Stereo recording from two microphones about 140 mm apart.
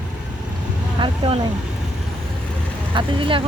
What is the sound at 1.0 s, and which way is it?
Speech, 45° right (ahead or behind).